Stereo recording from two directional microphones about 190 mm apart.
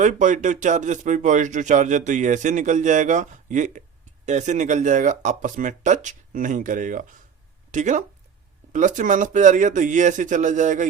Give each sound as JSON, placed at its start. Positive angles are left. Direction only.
{"t": 0.0, "sound": "speech", "side_deg": -40}